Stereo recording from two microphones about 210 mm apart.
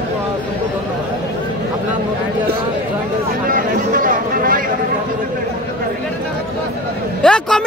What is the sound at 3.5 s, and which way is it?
Speech, 40° right (ahead or behind).